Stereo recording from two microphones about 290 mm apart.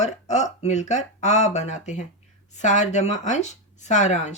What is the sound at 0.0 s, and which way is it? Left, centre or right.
Speech, left.